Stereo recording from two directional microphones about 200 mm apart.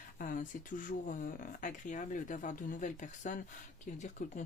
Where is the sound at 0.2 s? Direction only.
45° left (ahead or behind).